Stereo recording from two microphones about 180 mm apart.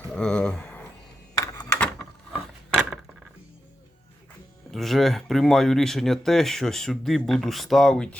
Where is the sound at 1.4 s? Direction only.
20° left (ahead or behind).